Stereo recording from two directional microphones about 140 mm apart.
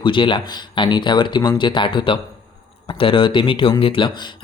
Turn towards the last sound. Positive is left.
turn(degrees=40)  # may be behind; listen again after turning